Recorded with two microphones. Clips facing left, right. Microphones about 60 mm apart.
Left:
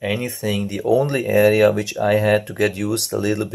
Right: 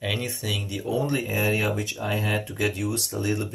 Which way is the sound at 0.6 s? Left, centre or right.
Left.